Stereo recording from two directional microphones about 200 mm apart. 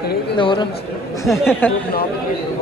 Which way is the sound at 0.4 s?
25° left (ahead or behind).